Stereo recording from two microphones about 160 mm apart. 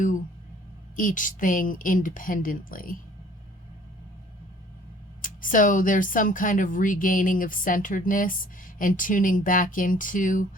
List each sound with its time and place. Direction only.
0.9 s speech: 55° left (ahead or behind)
5.2 s speech: 55° left (ahead or behind)